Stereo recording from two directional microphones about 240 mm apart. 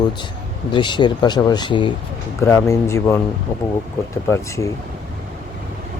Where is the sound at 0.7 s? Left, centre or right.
Centre.